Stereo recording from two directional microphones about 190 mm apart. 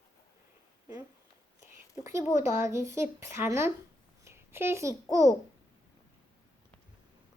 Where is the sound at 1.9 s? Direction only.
15° right (ahead or behind).